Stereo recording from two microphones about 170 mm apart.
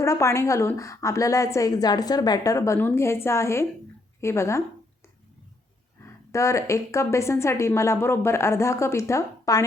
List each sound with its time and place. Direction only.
0.0 s a woman's voice: 15° left (ahead or behind)
6.3 s a woman's voice: 15° left (ahead or behind)